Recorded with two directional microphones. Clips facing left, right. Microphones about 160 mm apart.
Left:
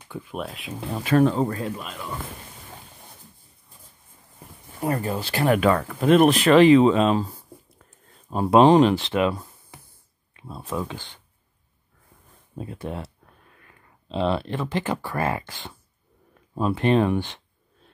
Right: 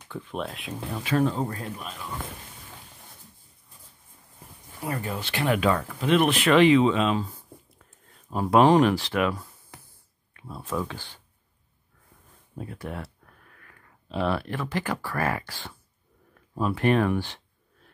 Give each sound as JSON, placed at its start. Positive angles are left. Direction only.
{"t": 0.1, "sound": "speech", "side_deg": 5}
{"t": 1.0, "sound": "speech", "side_deg": 65}
{"t": 4.8, "sound": "speech", "side_deg": 40}
{"t": 8.3, "sound": "speech", "side_deg": 25}
{"t": 12.5, "sound": "speech", "side_deg": 25}